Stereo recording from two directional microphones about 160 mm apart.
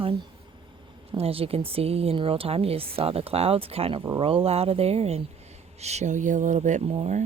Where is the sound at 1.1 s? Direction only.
35° right (ahead or behind).